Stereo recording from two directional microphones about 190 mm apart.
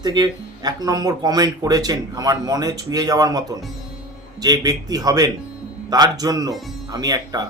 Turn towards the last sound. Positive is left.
turn(degrees=-20)  # may be behind; listen again after turning